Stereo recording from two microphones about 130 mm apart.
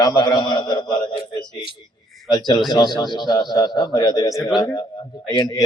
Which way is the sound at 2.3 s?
35° left (ahead or behind).